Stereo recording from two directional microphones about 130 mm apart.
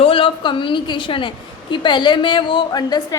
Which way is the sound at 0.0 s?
45° left (ahead or behind).